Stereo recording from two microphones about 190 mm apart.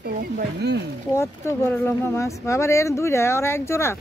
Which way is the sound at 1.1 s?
15° left (ahead or behind).